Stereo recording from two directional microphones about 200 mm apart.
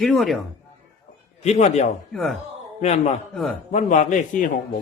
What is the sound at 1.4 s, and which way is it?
Speech, 35° left (ahead or behind).